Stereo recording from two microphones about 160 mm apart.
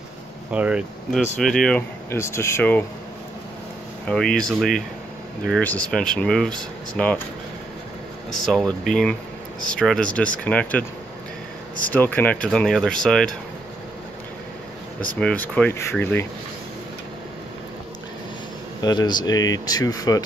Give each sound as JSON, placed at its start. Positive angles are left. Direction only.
{"t": 0.5, "sound": "speech", "side_deg": -10}
{"t": 1.4, "sound": "speech", "side_deg": 5}
{"t": 4.1, "sound": "speech", "side_deg": 5}
{"t": 8.3, "sound": "speech", "side_deg": 0}
{"t": 11.9, "sound": "speech", "side_deg": 10}
{"t": 15.1, "sound": "speech", "side_deg": 10}
{"t": 18.8, "sound": "speech", "side_deg": 25}